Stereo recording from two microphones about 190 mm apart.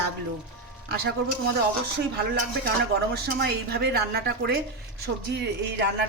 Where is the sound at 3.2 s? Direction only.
55° right (ahead or behind).